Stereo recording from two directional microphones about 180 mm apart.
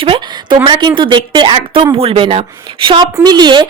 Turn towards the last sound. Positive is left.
turn(degrees=-25)  # may be behind; listen again after turning